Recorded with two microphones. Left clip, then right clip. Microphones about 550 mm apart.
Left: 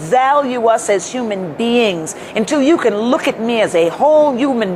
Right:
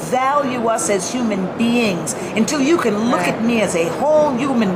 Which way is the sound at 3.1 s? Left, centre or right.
Left.